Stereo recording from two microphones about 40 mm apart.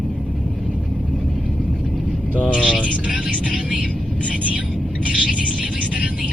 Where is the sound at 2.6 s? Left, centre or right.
Right.